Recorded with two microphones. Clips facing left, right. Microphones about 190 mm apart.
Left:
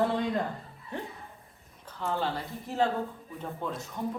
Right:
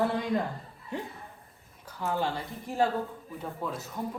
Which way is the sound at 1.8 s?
10° right (ahead or behind).